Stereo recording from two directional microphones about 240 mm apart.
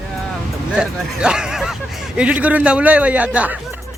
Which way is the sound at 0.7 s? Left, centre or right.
Centre.